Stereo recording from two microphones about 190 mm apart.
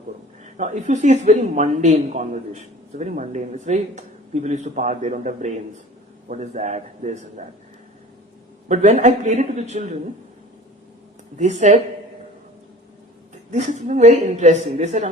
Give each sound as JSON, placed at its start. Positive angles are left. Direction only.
{"t": 0.4, "sound": "speech", "side_deg": -40}
{"t": 8.6, "sound": "speech", "side_deg": -40}
{"t": 11.3, "sound": "speech", "side_deg": -40}
{"t": 13.5, "sound": "speech", "side_deg": -35}